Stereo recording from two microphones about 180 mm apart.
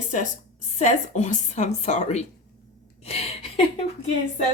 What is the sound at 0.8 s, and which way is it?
Speech, 40° left (ahead or behind).